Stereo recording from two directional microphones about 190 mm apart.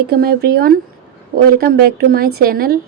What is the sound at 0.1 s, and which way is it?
A woman's voice, 55° right (ahead or behind).